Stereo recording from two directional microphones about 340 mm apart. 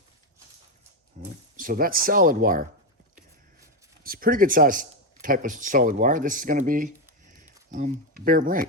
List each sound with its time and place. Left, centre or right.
1.2 s a sound: right
1.5 s speech: right
4.0 s speech: right